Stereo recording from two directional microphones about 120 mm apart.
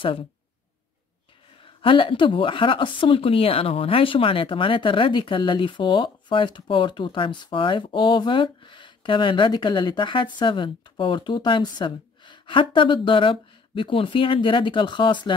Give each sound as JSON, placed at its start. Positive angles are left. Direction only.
{"t": 1.6, "sound": "a woman's voice", "side_deg": 45}